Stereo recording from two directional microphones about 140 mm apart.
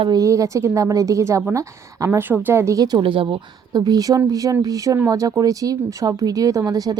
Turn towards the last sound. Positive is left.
turn(degrees=-25)  # may be behind; listen again after turning